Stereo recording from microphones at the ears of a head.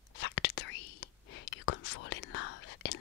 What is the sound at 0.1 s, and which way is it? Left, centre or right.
Whispering, left.